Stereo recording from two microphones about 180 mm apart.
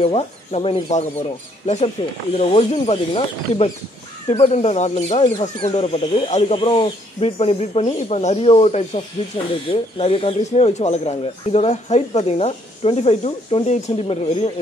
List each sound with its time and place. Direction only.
0.0 s speech: 35° left (ahead or behind)
4.3 s speech: 35° left (ahead or behind)